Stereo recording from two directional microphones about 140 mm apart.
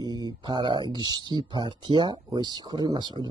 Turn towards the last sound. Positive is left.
turn(degrees=-30)  # may be behind; listen again after turning